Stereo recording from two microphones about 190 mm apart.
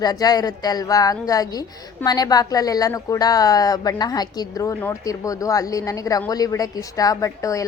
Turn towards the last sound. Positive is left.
turn(degrees=15)  # may be behind; listen again after turning